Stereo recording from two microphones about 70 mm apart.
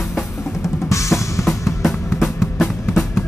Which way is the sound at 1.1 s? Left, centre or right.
Left.